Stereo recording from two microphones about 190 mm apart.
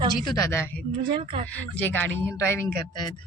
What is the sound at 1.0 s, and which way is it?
Speech, 25° right (ahead or behind).